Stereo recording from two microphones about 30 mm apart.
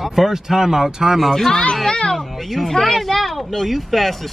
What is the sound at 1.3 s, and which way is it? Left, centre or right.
Speech, centre.